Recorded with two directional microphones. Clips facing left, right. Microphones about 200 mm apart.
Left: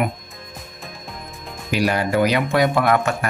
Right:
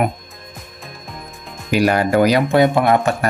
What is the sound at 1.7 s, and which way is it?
Speech, 50° right (ahead or behind).